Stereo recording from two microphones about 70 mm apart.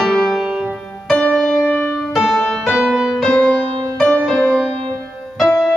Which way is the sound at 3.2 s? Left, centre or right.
Centre.